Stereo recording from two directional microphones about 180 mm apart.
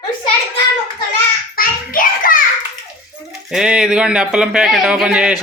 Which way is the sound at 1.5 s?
55° left (ahead or behind).